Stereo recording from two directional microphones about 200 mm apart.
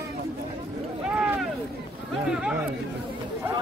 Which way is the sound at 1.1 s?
5° right (ahead or behind).